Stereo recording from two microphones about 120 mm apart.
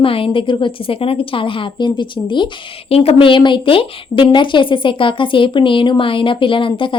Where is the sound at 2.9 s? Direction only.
55° left (ahead or behind).